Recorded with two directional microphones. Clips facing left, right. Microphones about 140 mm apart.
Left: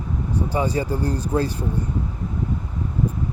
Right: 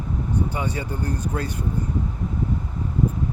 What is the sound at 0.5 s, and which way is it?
Speech, 35° left (ahead or behind).